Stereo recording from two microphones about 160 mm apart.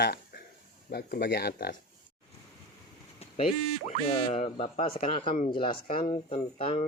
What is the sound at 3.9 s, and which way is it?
Speech, 40° left (ahead or behind).